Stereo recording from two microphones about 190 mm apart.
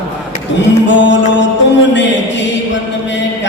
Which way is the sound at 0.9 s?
70° left (ahead or behind).